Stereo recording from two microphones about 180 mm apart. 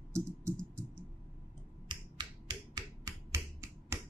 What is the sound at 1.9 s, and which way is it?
Finger snapping, 25° right (ahead or behind).